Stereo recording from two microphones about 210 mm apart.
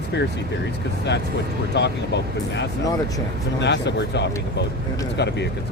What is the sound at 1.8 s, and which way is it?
Speech, 55° left (ahead or behind).